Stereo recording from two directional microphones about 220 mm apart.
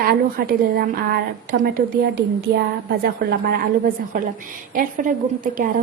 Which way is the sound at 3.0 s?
40° right (ahead or behind).